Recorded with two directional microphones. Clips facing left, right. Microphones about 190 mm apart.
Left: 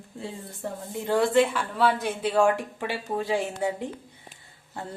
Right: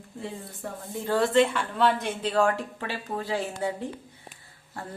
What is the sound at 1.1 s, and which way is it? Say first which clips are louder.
Speech: left 1 dB; 15° left (ahead or behind).